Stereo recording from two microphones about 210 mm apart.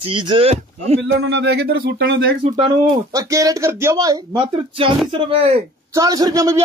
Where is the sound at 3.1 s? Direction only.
15° right (ahead or behind).